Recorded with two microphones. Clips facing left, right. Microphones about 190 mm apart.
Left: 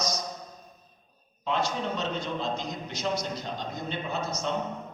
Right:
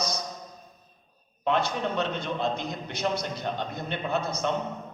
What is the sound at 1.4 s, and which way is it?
A man's voice, 60° right (ahead or behind).